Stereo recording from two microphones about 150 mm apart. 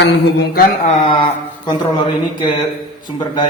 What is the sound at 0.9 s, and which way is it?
Speech, 35° left (ahead or behind).